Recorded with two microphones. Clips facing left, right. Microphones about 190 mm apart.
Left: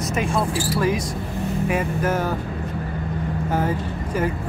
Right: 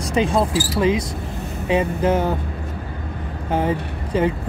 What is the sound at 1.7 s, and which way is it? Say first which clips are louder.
Speech: right 6 dB; 25° right (ahead or behind).